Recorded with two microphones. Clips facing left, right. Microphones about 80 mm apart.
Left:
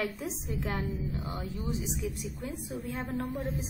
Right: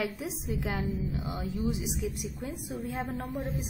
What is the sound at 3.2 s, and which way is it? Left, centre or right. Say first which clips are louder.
Speech: even; centre.